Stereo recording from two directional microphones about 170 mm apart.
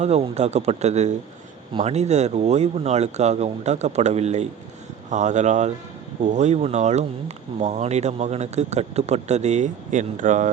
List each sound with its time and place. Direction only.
0.0 s speech: 40° right (ahead or behind)